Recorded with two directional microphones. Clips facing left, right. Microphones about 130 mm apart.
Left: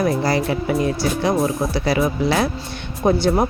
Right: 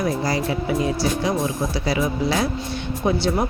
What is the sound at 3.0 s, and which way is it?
Speech, 45° left (ahead or behind).